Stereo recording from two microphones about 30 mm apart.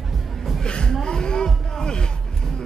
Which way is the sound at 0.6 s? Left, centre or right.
Left.